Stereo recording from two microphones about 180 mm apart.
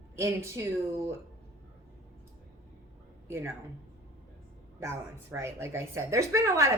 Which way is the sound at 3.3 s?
15° right (ahead or behind).